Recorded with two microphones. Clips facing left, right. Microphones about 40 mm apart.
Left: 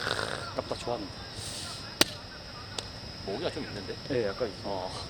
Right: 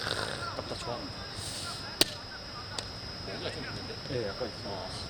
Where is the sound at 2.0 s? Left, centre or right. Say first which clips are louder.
Left 3 dB; left.